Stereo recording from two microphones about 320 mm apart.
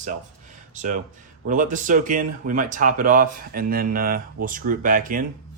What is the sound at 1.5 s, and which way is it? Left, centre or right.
Speech, right.